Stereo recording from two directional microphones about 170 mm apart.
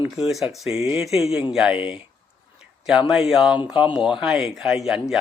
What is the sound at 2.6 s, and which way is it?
Speech, 5° right (ahead or behind).